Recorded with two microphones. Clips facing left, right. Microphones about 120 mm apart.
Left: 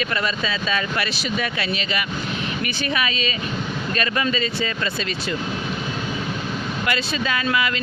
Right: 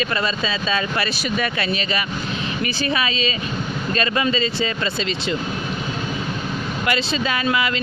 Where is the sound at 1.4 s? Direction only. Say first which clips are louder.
Right 2 dB; 50° right (ahead or behind).